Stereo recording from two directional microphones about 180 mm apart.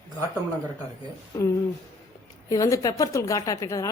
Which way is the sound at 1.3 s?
15° left (ahead or behind).